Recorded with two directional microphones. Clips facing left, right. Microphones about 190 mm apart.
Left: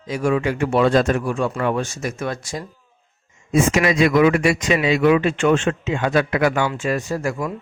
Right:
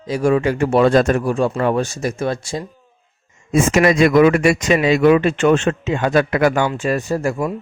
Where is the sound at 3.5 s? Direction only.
45° right (ahead or behind); by 7.5 s 30° right (ahead or behind).